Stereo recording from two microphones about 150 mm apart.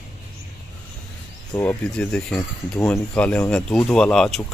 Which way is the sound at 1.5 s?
10° left (ahead or behind).